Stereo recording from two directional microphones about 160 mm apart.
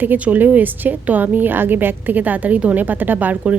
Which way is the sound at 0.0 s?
10° right (ahead or behind).